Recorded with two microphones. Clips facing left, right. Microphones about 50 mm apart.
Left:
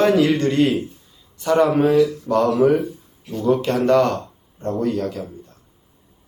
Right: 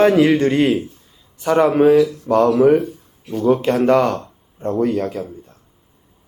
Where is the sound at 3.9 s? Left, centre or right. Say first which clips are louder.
Left 2 dB; centre.